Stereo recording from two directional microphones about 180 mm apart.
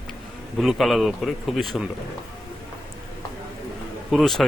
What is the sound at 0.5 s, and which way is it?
Speech, centre (ahead or behind).